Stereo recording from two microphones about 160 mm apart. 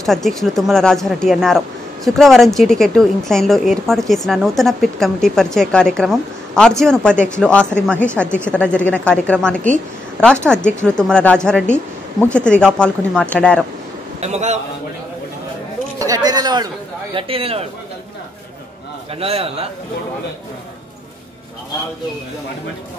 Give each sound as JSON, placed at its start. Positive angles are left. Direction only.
{"t": 0.0, "sound": "a woman's voice", "side_deg": 0}
{"t": 14.2, "sound": "a man's voice", "side_deg": -45}
{"t": 16.0, "sound": "speech", "side_deg": -25}
{"t": 19.1, "sound": "a man's voice", "side_deg": -40}